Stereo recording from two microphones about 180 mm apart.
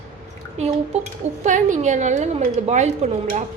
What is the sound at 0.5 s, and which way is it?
A woman's voice, 35° right (ahead or behind).